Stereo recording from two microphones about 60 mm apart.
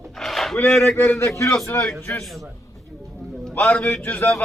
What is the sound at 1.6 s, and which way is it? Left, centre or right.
Speech, left.